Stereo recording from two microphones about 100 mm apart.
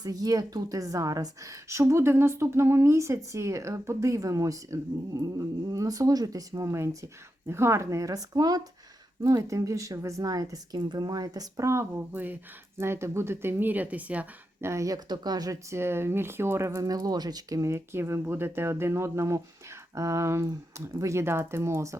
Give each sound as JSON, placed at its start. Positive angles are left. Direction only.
{"t": 0.0, "sound": "a woman's voice", "side_deg": -40}
{"t": 14.6, "sound": "a woman's voice", "side_deg": -30}
{"t": 15.7, "sound": "speech", "side_deg": -25}
{"t": 16.8, "sound": "speech", "side_deg": -40}